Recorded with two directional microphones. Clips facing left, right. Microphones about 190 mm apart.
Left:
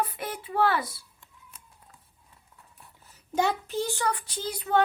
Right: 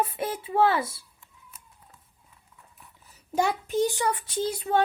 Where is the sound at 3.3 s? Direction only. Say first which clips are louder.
Right 2 dB; 10° right (ahead or behind); by 4.7 s 25° right (ahead or behind).